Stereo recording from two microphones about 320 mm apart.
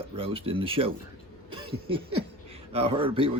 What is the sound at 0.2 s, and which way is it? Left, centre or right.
Speech, centre.